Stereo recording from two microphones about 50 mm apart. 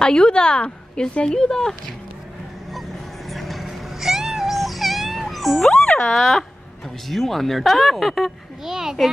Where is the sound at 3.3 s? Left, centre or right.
Centre.